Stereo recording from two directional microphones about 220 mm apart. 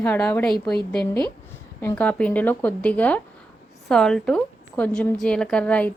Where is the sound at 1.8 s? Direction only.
10° left (ahead or behind).